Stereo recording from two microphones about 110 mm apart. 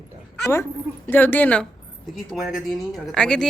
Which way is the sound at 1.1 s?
15° left (ahead or behind).